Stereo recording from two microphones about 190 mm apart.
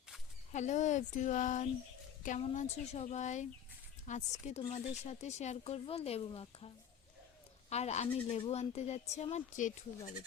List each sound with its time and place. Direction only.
0.5 s speech: 40° left (ahead or behind)
7.7 s speech: 35° left (ahead or behind)